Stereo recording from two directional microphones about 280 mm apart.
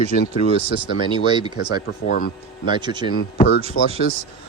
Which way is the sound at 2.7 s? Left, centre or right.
Centre.